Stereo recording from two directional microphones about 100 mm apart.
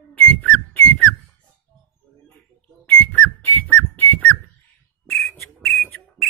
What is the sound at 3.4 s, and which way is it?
Whistling, 20° left (ahead or behind).